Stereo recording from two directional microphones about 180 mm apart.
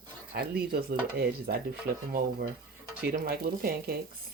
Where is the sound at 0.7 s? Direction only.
60° right (ahead or behind).